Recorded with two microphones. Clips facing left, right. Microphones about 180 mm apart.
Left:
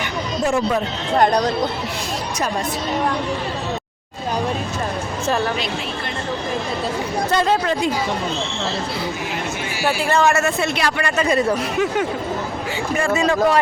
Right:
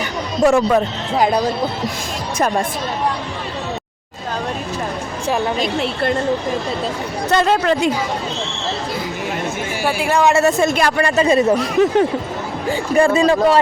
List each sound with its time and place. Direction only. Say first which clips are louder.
0.4 s speech: right 7 dB; 65° right (ahead or behind)
1.1 s speech: even; 5° right (ahead or behind)
7.3 s speech: right 4 dB; 75° right (ahead or behind)
9.8 s speech: right 1 dB; 10° right (ahead or behind)
10.3 s speech: right 6 dB; 40° right (ahead or behind)
11.0 s a man's voice: right 4 dB; 25° right (ahead or behind)